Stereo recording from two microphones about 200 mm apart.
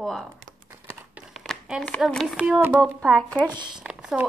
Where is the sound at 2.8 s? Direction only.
Centre (ahead or behind).